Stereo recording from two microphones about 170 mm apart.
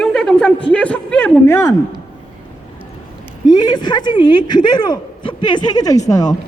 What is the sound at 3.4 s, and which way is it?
A woman's voice, 25° left (ahead or behind).